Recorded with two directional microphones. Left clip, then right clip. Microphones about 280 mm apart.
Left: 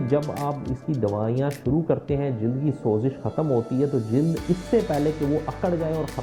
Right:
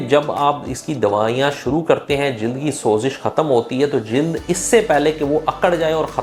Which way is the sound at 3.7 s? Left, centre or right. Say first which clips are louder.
Right 6 dB; centre.